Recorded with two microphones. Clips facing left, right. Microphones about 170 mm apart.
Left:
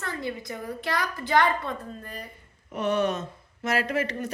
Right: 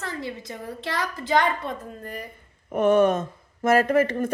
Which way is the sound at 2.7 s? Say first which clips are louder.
Right 7 dB; 50° right (ahead or behind).